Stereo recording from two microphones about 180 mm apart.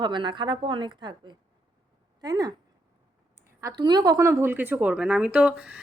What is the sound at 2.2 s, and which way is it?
Speech, 20° right (ahead or behind).